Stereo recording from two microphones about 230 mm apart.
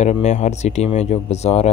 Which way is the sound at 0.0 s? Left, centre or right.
Left.